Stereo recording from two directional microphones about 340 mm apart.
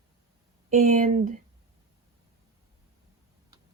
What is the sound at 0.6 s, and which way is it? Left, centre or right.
Speech, right.